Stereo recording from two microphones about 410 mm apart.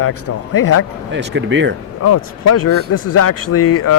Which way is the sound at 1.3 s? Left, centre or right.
Right.